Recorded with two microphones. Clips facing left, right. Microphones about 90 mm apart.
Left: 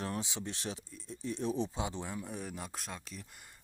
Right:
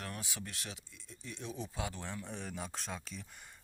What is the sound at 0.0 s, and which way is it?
Speech, 25° left (ahead or behind).